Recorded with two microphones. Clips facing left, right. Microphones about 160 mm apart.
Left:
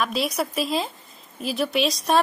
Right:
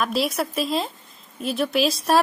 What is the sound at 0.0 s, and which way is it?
A woman's voice, centre (ahead or behind).